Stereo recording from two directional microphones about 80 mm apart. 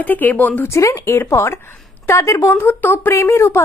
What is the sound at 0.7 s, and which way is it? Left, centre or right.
Speech, left.